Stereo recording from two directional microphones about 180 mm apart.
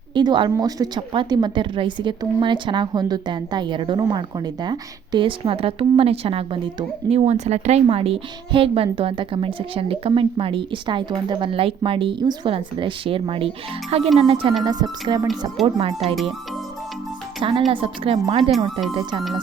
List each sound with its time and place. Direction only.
0.1 s a woman's voice: 25° right (ahead or behind)
17.7 s a woman's voice: 30° right (ahead or behind)